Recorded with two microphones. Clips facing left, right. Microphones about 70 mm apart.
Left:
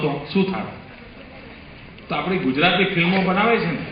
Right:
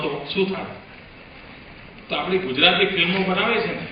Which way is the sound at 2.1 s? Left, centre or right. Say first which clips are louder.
Left 1 dB; left.